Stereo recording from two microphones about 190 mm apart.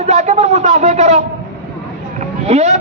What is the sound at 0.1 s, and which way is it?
Speech, 35° right (ahead or behind).